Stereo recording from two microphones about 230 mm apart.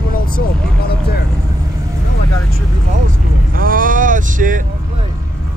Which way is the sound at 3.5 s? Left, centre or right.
Right.